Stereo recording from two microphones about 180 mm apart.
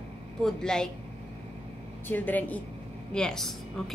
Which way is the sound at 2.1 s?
10° left (ahead or behind).